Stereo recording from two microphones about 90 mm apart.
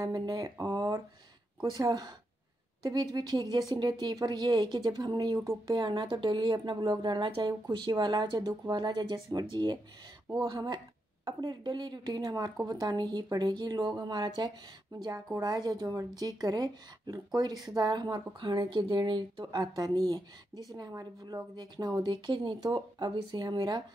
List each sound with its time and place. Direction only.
0.4 s a woman's voice: 45° right (ahead or behind)
5.7 s a woman's voice: 55° right (ahead or behind)
7.2 s speech: 80° right
7.8 s speech: 55° right (ahead or behind)